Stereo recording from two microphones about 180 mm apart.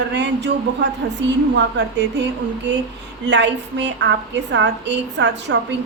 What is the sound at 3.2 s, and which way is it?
A woman's voice, 75° right (ahead or behind).